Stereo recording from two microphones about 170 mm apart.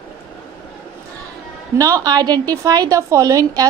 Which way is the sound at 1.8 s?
20° right (ahead or behind).